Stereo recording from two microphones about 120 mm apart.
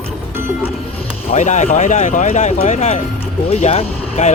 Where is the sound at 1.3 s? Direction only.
80° left.